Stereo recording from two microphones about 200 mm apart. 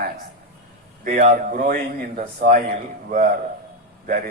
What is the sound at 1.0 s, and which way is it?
Speech, 35° right (ahead or behind).